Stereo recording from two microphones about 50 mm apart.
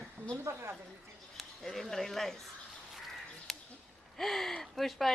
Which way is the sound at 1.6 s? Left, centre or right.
Centre.